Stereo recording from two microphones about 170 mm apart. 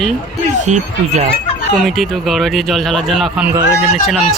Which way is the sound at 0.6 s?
45° right (ahead or behind).